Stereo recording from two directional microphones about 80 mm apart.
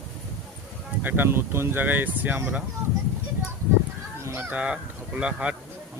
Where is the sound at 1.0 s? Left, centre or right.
Right.